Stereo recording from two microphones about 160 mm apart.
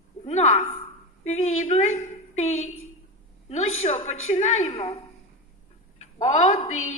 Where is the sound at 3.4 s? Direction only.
45° left (ahead or behind).